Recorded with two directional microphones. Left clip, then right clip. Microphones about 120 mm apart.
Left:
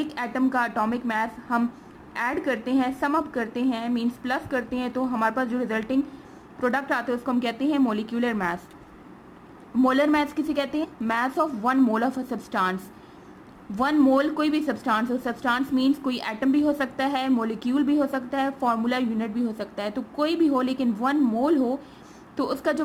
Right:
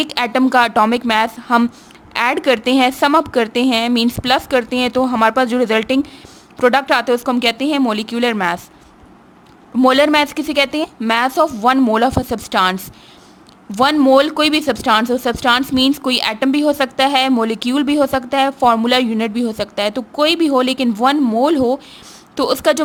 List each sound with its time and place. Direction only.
0.0 s a woman's voice: 45° right (ahead or behind)
9.8 s speech: 40° right (ahead or behind)
13.7 s speech: 40° right (ahead or behind)